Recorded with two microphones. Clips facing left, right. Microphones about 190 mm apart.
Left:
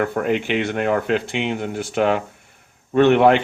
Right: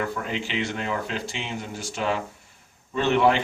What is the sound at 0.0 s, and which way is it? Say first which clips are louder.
Speech: left 8 dB; 55° left (ahead or behind).